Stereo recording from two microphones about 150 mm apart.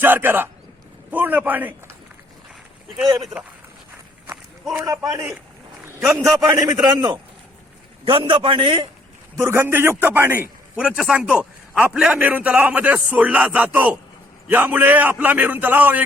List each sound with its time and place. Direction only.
0.0 s speech: 15° right (ahead or behind)
4.7 s a man's voice: 20° right (ahead or behind)
6.4 s a man's voice: 25° right (ahead or behind)
9.4 s speech: 15° right (ahead or behind)